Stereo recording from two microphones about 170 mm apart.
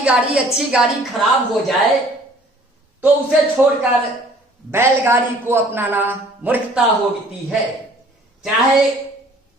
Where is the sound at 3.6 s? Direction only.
10° right (ahead or behind).